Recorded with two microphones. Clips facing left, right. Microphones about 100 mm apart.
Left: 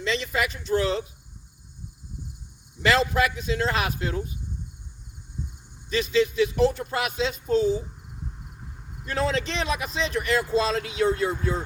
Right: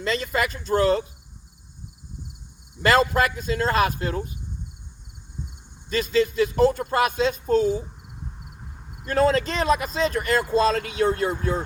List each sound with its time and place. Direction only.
0.0 s speech: 45° right (ahead or behind)
2.8 s speech: 45° right (ahead or behind)
5.9 s speech: 45° right (ahead or behind)
9.0 s speech: 45° right (ahead or behind)